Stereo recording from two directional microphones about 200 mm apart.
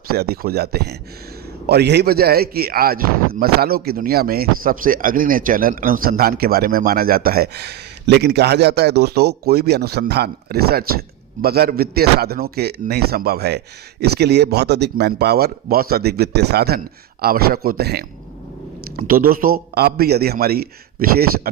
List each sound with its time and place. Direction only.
0.1 s a man's voice: 50° right (ahead or behind)